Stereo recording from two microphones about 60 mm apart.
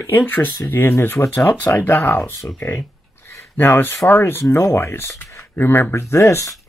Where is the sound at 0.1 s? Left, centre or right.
Left.